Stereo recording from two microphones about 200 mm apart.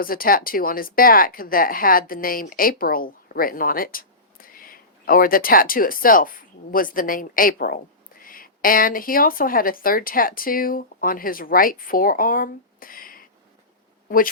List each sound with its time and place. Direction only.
0.0 s a woman's voice: 45° left (ahead or behind)